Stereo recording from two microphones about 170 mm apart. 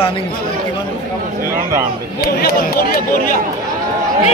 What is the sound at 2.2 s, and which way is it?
Speech, 65° left (ahead or behind).